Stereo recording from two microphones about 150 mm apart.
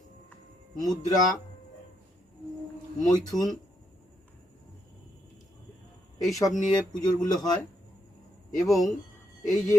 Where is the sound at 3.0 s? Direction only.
25° left (ahead or behind).